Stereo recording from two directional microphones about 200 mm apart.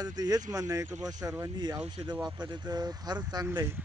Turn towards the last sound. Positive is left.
turn(degrees=-10)  # may be behind; listen again after turning